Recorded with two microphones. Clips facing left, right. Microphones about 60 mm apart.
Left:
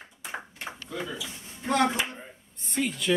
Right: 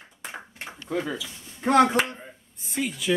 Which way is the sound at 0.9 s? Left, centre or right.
Right.